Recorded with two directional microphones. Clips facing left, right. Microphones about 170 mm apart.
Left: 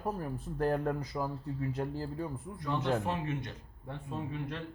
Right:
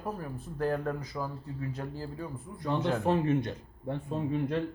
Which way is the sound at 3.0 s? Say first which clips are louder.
Right 8 dB; 35° right (ahead or behind).